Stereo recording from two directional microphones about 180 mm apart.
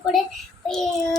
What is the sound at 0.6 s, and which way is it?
Child singing, 5° left (ahead or behind).